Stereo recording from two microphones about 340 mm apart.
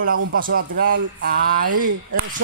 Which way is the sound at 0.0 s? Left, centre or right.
Right.